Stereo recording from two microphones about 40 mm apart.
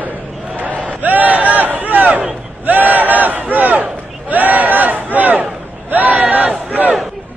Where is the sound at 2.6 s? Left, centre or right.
Right.